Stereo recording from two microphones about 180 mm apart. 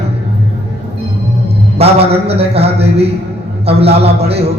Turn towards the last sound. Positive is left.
turn(degrees=-35)  # may be behind; listen again after turning